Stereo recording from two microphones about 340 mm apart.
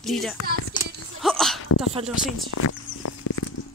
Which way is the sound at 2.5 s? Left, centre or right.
Left.